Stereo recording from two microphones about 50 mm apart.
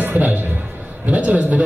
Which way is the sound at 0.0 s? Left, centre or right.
Right.